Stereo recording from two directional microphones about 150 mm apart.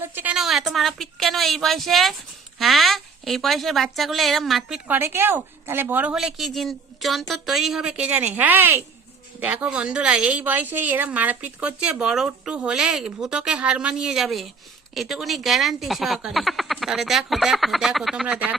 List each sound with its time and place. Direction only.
0.0 s speech: 15° right (ahead or behind)
4.9 s a woman's voice: 15° right (ahead or behind)